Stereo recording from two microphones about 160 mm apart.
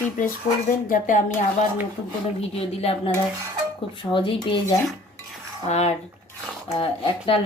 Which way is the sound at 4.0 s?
30° left (ahead or behind).